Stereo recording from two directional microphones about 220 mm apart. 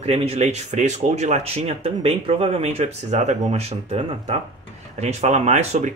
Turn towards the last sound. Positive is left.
turn(degrees=-30)  # may be behind; listen again after turning